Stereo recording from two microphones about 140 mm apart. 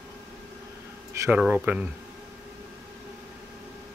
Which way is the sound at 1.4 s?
10° right (ahead or behind).